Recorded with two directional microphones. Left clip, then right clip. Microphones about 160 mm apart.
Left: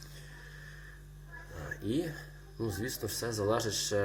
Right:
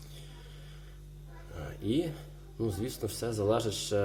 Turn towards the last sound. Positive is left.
turn(degrees=-10)  # may be behind; listen again after turning